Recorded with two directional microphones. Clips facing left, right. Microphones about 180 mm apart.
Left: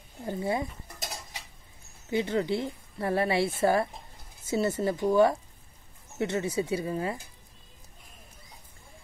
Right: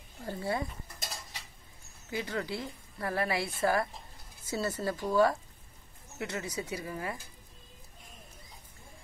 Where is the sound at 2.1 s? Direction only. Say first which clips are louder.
Left 8 dB; 25° left (ahead or behind).